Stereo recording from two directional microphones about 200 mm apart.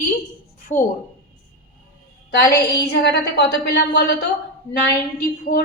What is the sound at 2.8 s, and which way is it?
A woman's voice, 55° left (ahead or behind).